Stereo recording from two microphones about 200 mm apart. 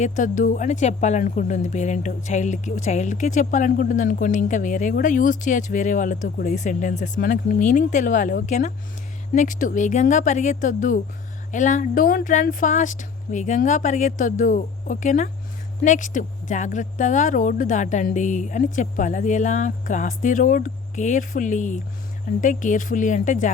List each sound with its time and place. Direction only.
0.0 s speech: 40° left (ahead or behind)